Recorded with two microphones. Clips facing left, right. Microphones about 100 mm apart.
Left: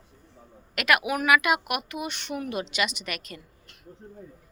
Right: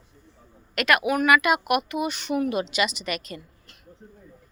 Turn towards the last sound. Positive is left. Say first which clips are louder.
# right 5 dB
turn(degrees=0)  # may be behind; listen again after turning